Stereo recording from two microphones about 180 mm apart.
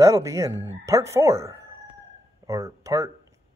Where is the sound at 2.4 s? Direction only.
15° right (ahead or behind).